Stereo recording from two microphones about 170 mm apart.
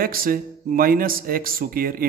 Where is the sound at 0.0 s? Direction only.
60° right (ahead or behind).